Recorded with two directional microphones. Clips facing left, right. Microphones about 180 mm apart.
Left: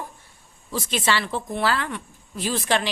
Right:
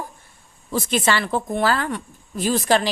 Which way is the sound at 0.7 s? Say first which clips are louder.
Right 4 dB; 50° right (ahead or behind).